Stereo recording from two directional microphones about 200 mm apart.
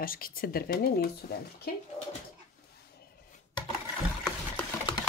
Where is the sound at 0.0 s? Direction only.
45° left (ahead or behind).